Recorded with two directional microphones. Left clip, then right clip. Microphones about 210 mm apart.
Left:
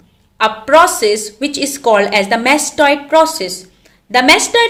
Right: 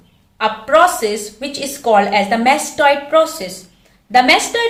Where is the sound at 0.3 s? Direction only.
55° left (ahead or behind).